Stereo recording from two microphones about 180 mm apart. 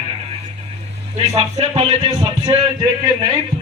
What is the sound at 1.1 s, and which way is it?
Speech, 35° right (ahead or behind).